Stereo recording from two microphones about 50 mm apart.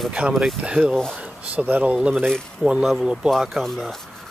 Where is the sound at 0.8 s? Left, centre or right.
Centre.